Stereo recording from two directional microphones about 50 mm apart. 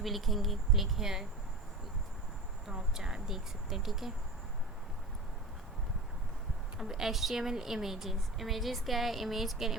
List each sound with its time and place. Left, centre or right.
0.0 s speech: centre
2.6 s speech: centre
6.7 s speech: centre